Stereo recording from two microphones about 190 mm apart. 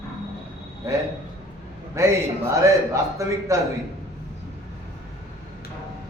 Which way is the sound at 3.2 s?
15° right (ahead or behind).